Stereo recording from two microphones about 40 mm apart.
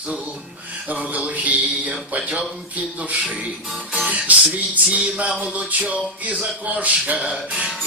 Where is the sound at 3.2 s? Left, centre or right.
Right.